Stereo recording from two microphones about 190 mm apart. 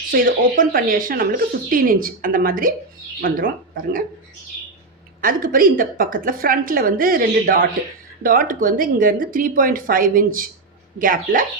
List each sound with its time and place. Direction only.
0.1 s speech: 50° right (ahead or behind)
5.2 s speech: 50° right (ahead or behind)